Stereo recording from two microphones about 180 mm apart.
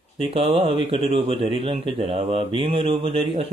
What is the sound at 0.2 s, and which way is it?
Speech, 30° right (ahead or behind).